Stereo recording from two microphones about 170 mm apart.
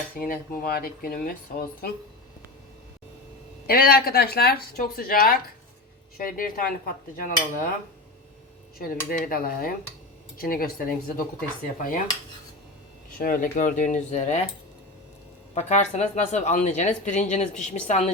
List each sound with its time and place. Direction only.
0.2 s speech: 60° left (ahead or behind)
3.7 s speech: 65° left (ahead or behind)
9.0 s speech: 60° left (ahead or behind)
13.1 s speech: 55° left (ahead or behind)
15.5 s speech: 45° left (ahead or behind)